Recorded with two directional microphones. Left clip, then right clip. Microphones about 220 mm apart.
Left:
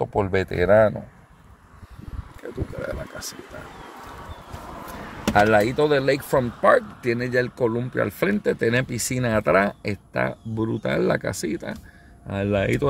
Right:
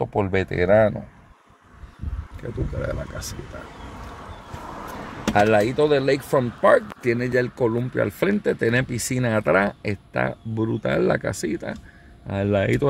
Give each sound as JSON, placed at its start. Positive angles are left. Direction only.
{"t": 0.0, "sound": "speech", "side_deg": 0}
{"t": 2.4, "sound": "speech", "side_deg": 0}
{"t": 2.8, "sound": "speech", "side_deg": -10}
{"t": 4.8, "sound": "a sound", "side_deg": -40}
{"t": 5.3, "sound": "speech", "side_deg": -5}
{"t": 6.6, "sound": "speech", "side_deg": -20}